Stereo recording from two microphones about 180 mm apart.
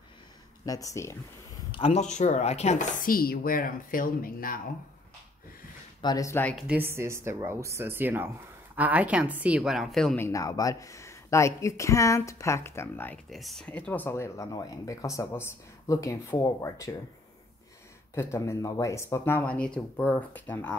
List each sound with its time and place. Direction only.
0.7 s speech: 20° left (ahead or behind)
1.7 s speech: 30° left (ahead or behind); by 4.6 s 50° left (ahead or behind)
5.9 s speech: 20° left (ahead or behind)
6.5 s speech: 10° right (ahead or behind)
10.2 s speech: 20° left (ahead or behind)
13.3 s speech: centre (ahead or behind); by 16.9 s 15° left (ahead or behind)
18.1 s speech: 15° left (ahead or behind)